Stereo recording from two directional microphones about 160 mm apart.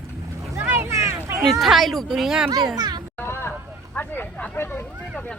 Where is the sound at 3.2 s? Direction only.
15° left (ahead or behind).